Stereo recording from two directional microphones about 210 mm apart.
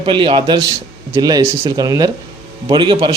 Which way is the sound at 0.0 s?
25° right (ahead or behind).